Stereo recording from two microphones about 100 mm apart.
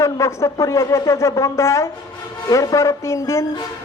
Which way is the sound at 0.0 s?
30° left (ahead or behind).